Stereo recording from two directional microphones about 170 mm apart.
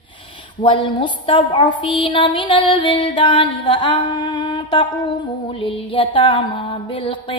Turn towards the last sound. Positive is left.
turn(degrees=30)  # may be behind; listen again after turning